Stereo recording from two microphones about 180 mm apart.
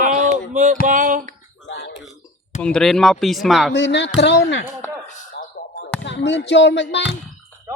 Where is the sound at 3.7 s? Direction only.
80° left.